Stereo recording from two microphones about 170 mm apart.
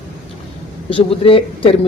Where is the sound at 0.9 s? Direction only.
35° left (ahead or behind).